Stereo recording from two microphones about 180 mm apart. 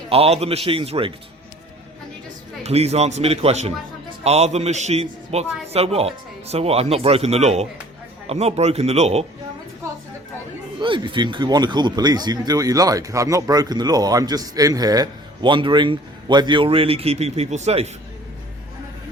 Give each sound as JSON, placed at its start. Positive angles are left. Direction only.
{"t": 0.1, "sound": "speech", "side_deg": -35}
{"t": 2.6, "sound": "speech", "side_deg": -35}
{"t": 10.8, "sound": "speech", "side_deg": -25}